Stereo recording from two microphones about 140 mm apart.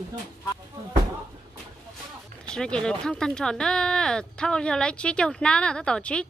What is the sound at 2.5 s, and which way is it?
Speech, 5° left (ahead or behind).